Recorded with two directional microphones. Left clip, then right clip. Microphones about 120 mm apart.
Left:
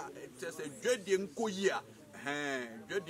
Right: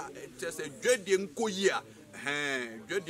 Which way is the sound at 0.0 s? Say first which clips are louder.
Right 4 dB; 10° right (ahead or behind).